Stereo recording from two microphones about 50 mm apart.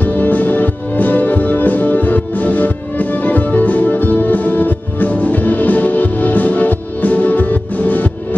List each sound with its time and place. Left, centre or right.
0.0 s music: left